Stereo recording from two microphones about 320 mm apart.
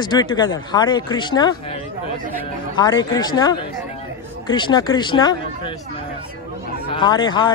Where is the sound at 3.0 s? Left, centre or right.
Centre.